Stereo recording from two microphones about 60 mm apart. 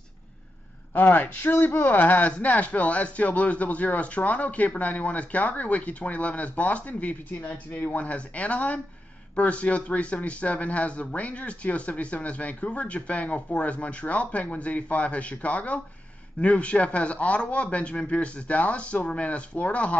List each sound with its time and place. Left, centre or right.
0.9 s a man's voice: left